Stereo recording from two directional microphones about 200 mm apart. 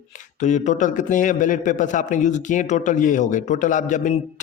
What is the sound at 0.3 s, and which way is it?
Speech, 35° left (ahead or behind).